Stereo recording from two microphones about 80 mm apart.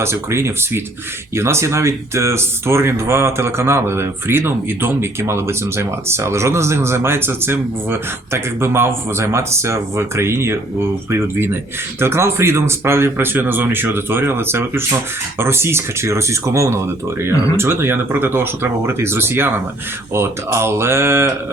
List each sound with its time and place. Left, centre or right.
0.0 s speech: right